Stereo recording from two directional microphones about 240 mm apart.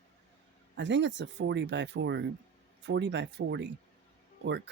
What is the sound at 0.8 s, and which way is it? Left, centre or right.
Speech, right.